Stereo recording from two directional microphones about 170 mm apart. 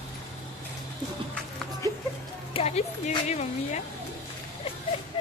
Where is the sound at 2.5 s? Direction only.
35° left (ahead or behind).